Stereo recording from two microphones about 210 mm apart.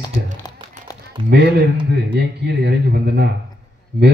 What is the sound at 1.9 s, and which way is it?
Speech, 50° right (ahead or behind).